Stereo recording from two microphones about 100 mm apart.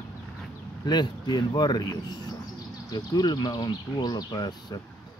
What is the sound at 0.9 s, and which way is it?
Speech, 45° left (ahead or behind).